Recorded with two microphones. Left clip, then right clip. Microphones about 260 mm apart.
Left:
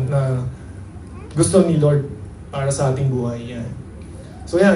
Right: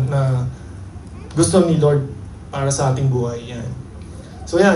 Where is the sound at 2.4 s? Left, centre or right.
Right.